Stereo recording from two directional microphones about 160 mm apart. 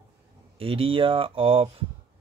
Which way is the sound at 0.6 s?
35° right (ahead or behind).